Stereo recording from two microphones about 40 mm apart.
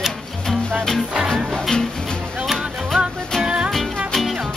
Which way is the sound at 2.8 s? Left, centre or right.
Centre.